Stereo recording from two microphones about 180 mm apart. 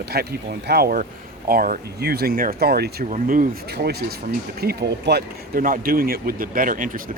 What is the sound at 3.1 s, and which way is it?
Speech, 50° right (ahead or behind).